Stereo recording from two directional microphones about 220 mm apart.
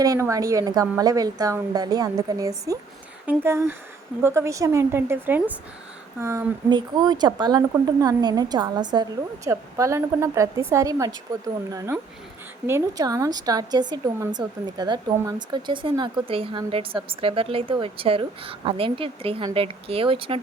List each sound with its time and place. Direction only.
0.0 s a woman's voice: 15° right (ahead or behind)